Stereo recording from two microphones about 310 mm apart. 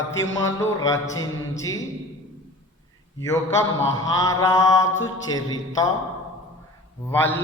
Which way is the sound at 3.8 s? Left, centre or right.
Centre.